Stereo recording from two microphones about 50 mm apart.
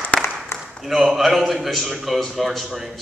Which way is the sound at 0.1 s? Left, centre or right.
Left.